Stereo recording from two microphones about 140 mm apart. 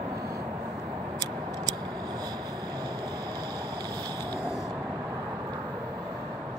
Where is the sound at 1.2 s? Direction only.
25° right (ahead or behind).